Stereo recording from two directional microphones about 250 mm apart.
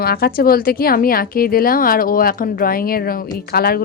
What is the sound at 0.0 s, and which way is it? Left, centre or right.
A woman's voice, left.